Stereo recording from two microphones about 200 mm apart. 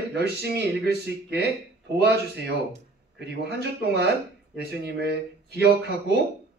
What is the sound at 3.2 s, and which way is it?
A man's voice, 55° right (ahead or behind).